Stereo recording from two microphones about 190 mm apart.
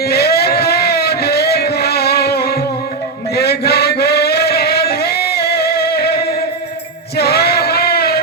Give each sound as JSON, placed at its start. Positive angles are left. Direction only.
{"t": 0.0, "sound": "a sound", "side_deg": 55}
{"t": 3.3, "sound": "chant", "side_deg": 55}
{"t": 7.2, "sound": "male singing", "side_deg": 55}